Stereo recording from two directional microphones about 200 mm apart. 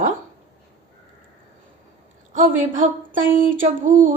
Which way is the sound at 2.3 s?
40° right (ahead or behind).